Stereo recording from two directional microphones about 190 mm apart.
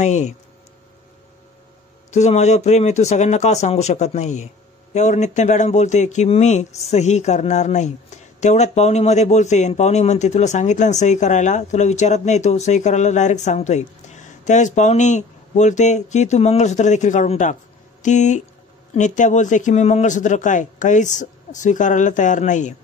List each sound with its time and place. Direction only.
0.0 s speech: 40° left (ahead or behind)
2.0 s speech: 35° left (ahead or behind)